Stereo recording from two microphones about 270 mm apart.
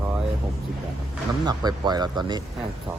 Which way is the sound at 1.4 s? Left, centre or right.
Centre.